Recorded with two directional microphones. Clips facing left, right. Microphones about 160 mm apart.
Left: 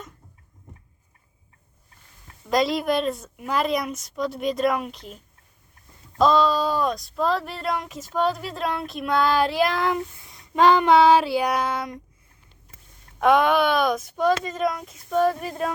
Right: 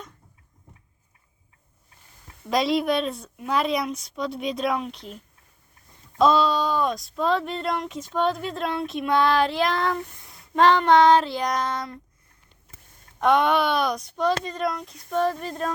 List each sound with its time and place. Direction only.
2.5 s speech: centre (ahead or behind)
10.5 s child singing: 5° left (ahead or behind)
13.1 s speech: centre (ahead or behind)